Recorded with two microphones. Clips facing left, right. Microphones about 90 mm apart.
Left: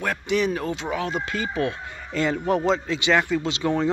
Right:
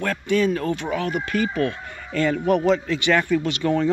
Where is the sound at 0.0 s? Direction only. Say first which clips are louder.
Right 2 dB; 15° left (ahead or behind).